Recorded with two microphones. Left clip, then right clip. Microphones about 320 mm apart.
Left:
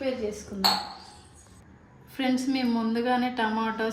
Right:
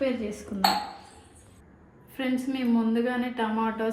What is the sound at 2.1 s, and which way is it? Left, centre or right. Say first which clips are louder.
A woman's voice: left 2 dB; centre.